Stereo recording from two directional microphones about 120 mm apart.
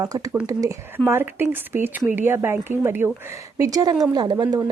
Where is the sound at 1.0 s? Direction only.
20° right (ahead or behind).